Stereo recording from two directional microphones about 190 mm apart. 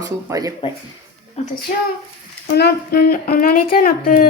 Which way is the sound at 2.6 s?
55° left (ahead or behind).